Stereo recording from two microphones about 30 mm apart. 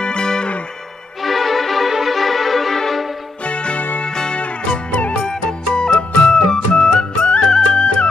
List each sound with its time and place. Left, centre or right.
0.0 s music: left
1.2 s music: centre
1.9 s violin: centre
2.1 s violin: centre
3.4 s music: left
5.2 s music: centre
5.8 s music: left
7.2 s music: left